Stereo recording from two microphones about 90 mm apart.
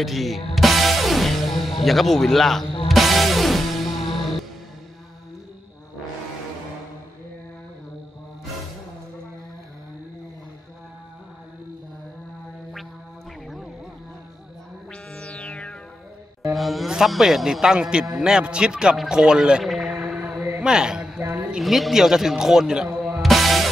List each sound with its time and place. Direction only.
0.0 s music: centre (ahead or behind)
14.9 s music: 10° left (ahead or behind)
16.5 s a man's voice: centre (ahead or behind)
21.2 s a sound: 25° right (ahead or behind)
21.5 s a man's voice: 5° right (ahead or behind)